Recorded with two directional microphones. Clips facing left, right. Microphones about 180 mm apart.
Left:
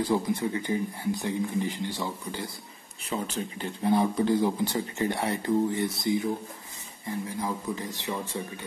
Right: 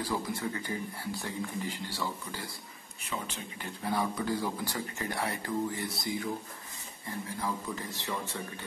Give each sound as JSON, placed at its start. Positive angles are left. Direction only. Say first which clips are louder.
{"t": 0.0, "sound": "speech", "louder": "left 7 dB", "side_deg": 20}
{"t": 3.1, "sound": "speech", "louder": "left 7 dB", "side_deg": 30}